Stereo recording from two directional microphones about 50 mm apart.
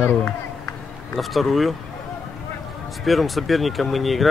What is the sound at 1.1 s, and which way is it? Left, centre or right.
Speech, centre.